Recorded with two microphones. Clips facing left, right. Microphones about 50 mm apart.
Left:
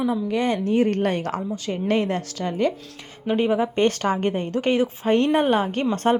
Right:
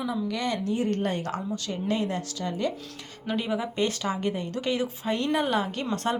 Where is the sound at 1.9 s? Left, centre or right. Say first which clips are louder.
Left 6 dB; left.